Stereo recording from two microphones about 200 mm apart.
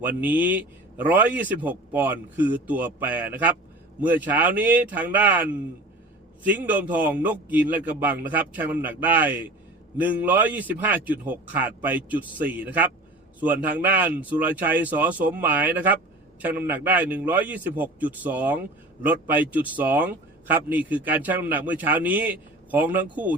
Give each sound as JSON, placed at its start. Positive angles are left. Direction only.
{"t": 0.0, "sound": "a man's voice", "side_deg": -10}